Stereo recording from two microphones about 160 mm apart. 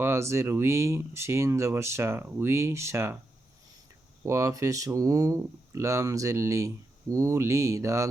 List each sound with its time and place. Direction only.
0.0 s speech: 15° right (ahead or behind)
4.3 s speech: 20° right (ahead or behind)